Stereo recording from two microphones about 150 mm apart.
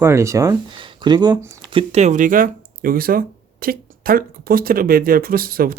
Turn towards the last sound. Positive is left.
turn(degrees=-80)